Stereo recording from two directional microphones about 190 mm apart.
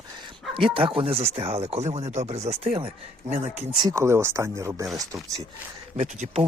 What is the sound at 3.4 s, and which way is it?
Speech, 10° right (ahead or behind).